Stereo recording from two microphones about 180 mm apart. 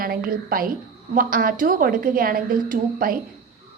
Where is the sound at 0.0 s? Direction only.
55° right (ahead or behind).